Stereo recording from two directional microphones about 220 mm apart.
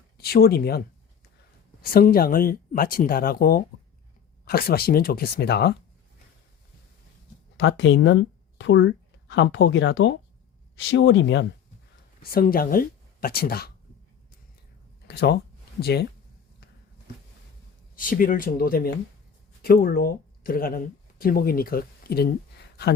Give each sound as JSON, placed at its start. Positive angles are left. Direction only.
{"t": 0.2, "sound": "speech", "side_deg": 45}
{"t": 1.8, "sound": "speech", "side_deg": 40}
{"t": 7.5, "sound": "speech", "side_deg": 55}
{"t": 12.2, "sound": "speech", "side_deg": 40}
{"t": 15.0, "sound": "speech", "side_deg": 45}
{"t": 17.9, "sound": "speech", "side_deg": 40}